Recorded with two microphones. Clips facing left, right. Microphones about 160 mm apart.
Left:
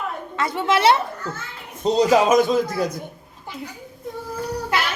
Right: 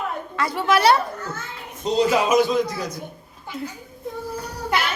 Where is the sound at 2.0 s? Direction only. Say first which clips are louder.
Left 2 dB; 40° left (ahead or behind).